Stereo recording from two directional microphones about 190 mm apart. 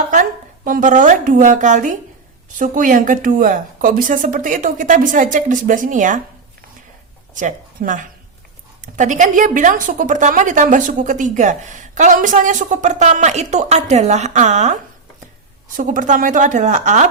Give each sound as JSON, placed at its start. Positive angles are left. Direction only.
{"t": 0.1, "sound": "a woman's voice", "side_deg": -45}
{"t": 7.3, "sound": "a woman's voice", "side_deg": -45}